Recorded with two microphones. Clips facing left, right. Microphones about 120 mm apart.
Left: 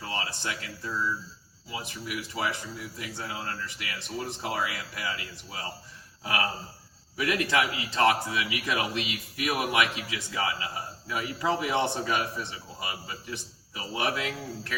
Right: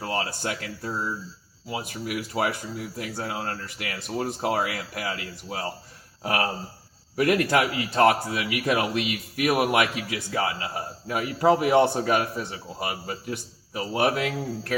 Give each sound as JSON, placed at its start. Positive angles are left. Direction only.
{"t": 0.0, "sound": "speech", "side_deg": -50}